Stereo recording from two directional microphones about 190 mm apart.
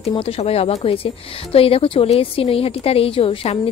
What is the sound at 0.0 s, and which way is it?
Speech, 30° left (ahead or behind).